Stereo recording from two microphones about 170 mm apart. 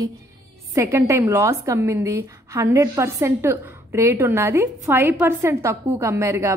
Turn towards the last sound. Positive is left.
turn(degrees=-15)  # may be behind; listen again after turning